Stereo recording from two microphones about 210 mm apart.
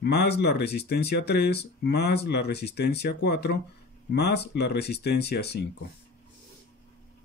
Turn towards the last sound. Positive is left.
turn(degrees=50)  # may be behind; listen again after turning